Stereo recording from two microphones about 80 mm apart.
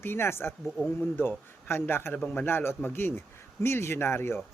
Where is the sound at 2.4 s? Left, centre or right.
Left.